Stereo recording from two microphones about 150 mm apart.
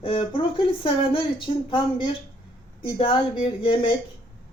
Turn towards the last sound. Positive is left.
turn(degrees=35)  # may be behind; listen again after turning